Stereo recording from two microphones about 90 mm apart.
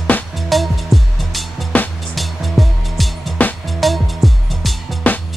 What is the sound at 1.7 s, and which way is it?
Music, 15° left (ahead or behind).